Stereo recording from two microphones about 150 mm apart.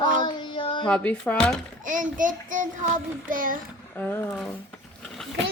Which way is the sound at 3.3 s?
65° right (ahead or behind).